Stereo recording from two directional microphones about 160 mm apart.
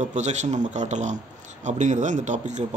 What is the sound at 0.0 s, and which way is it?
Speech, 45° right (ahead or behind).